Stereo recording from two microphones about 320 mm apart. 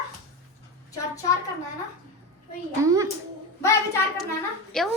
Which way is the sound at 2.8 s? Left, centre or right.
Centre.